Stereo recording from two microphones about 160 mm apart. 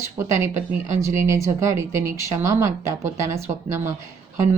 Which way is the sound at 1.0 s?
20° right (ahead or behind).